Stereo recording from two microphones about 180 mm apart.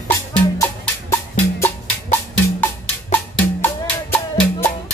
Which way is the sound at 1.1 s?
15° left (ahead or behind).